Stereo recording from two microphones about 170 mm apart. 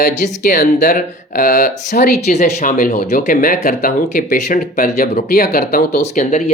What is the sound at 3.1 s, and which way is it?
Speech, 55° left (ahead or behind).